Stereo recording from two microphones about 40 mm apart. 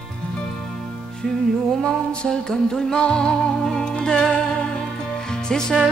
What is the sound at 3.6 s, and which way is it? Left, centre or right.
Music, centre.